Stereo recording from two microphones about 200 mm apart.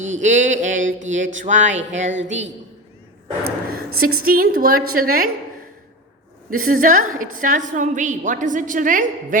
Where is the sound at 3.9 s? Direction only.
90° right.